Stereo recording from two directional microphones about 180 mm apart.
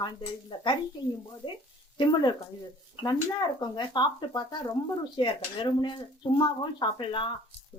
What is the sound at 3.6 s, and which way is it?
Speech, 25° left (ahead or behind).